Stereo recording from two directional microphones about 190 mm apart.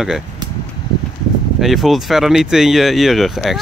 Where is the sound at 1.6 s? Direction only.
Centre (ahead or behind).